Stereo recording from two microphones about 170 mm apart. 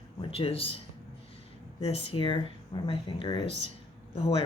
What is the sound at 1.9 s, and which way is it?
Speech, 30° left (ahead or behind).